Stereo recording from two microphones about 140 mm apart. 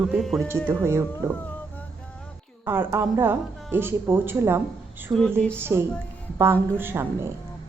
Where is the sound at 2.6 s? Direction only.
15° right (ahead or behind).